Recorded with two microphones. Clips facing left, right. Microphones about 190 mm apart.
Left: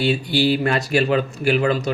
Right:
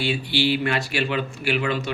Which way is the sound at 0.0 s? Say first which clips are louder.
Left 4 dB; 40° left (ahead or behind).